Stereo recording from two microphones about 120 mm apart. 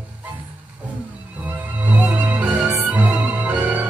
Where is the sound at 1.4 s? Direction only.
15° right (ahead or behind).